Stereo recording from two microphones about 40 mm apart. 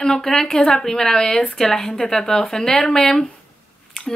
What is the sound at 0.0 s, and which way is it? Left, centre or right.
Speech, centre.